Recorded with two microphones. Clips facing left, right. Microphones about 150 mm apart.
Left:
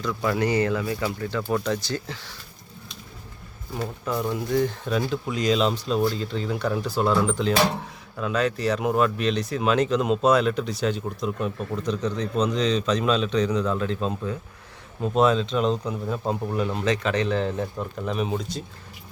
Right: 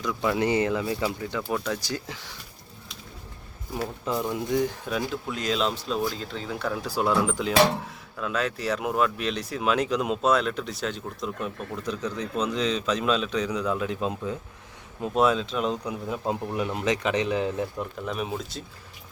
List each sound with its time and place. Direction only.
0.3 s speech: 20° right (ahead or behind)
1.0 s speech: 10° right (ahead or behind)
4.0 s speech: 15° right (ahead or behind)